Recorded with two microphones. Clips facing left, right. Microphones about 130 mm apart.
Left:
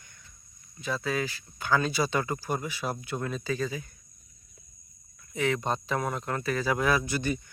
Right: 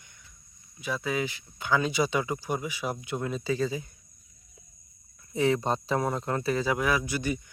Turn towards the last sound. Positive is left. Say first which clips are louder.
# left 1 dB
turn(degrees=-10)  # may be behind; listen again after turning